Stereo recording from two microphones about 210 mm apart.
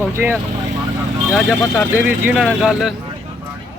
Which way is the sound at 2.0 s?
5° right (ahead or behind).